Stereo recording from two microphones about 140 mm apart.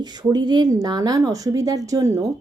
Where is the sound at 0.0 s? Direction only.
30° right (ahead or behind).